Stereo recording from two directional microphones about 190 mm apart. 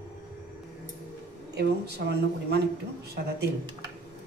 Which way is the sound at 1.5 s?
60° right (ahead or behind).